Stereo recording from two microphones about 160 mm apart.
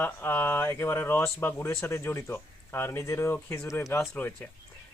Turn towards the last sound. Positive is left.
turn(degrees=10)  # may be behind; listen again after turning